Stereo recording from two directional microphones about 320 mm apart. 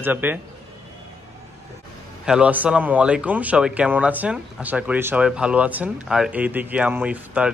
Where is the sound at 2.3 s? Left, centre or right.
Centre.